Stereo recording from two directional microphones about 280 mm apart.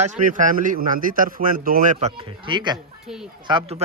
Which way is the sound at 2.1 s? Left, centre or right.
Centre.